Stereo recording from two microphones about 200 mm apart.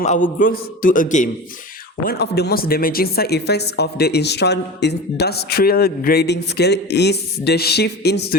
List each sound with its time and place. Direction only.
0.0 s a man's voice: 40° left (ahead or behind)
2.0 s speech: 55° left (ahead or behind)